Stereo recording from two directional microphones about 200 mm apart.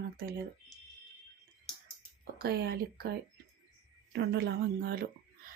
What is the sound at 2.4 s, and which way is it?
Speech, 50° right (ahead or behind).